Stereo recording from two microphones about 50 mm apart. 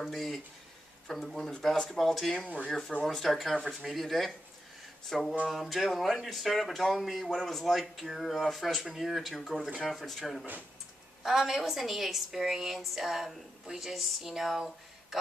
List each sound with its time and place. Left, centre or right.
0.0 s a woman's voice: centre
2.4 s speech: centre
3.1 s a woman's voice: centre